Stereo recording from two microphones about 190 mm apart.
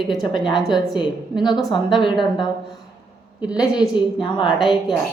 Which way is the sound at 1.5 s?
Centre (ahead or behind).